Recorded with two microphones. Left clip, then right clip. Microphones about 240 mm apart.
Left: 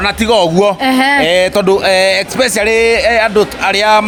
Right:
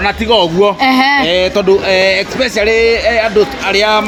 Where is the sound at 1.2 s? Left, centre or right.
Left.